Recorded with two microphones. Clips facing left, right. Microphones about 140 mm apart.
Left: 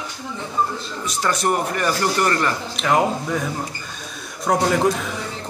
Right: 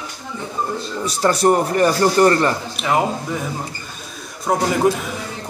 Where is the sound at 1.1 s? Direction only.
35° right (ahead or behind).